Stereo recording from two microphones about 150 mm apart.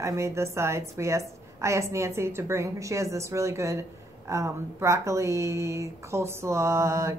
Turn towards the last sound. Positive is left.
turn(degrees=-20)  # may be behind; listen again after turning